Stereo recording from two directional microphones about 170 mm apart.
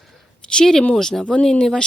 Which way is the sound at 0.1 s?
5° left (ahead or behind).